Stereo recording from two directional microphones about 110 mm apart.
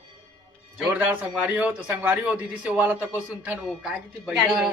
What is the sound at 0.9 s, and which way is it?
Speech, 15° right (ahead or behind).